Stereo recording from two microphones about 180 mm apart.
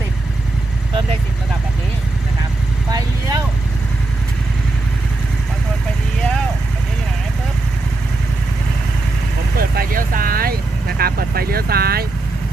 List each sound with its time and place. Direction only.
9.6 s speech: 55° right (ahead or behind)